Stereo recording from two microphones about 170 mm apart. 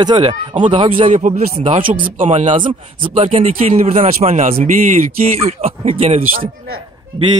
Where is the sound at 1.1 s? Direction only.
50° right (ahead or behind).